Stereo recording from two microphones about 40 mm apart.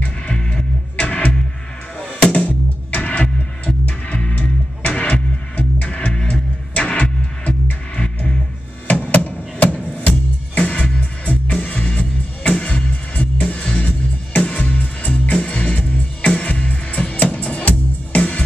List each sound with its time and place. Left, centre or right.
0.3 s music: left
0.9 s music: left
2.4 s music: left
8.8 s a sound: left
9.9 s music: left
15.3 s music: left